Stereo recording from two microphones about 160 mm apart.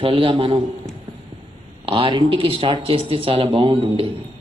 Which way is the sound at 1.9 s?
35° right (ahead or behind).